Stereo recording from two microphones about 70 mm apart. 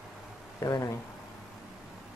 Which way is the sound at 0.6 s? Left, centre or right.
Left.